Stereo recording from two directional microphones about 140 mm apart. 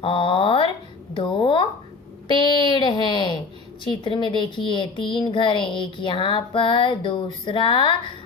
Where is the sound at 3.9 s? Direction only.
35° left (ahead or behind).